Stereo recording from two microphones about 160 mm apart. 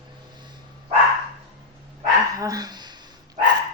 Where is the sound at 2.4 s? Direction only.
25° right (ahead or behind).